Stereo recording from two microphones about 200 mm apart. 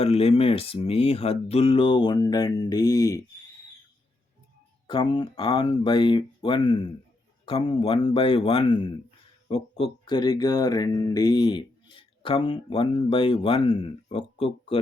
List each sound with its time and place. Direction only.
0.0 s speech: 30° left (ahead or behind)
4.9 s speech: 20° left (ahead or behind)